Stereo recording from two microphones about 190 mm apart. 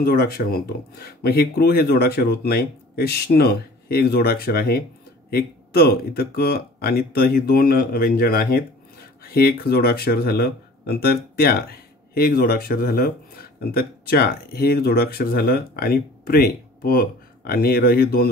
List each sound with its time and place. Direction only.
0.0 s speech: 55° left (ahead or behind)